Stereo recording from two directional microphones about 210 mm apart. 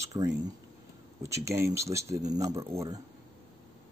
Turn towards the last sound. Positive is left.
turn(degrees=-15)  # may be behind; listen again after turning